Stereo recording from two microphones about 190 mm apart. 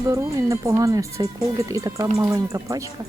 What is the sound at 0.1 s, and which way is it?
Speech, 15° right (ahead or behind).